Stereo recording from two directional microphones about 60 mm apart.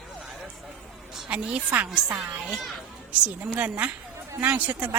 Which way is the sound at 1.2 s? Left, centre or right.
Right.